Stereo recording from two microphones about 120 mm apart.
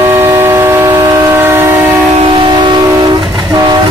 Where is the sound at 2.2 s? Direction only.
45° right (ahead or behind).